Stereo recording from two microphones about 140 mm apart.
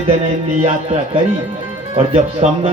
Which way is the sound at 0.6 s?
45° right (ahead or behind).